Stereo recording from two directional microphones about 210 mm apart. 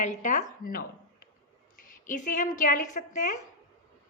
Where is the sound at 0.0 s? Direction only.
35° left (ahead or behind).